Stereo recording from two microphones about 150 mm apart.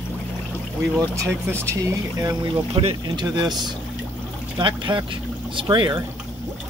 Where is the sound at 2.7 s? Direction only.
35° right (ahead or behind).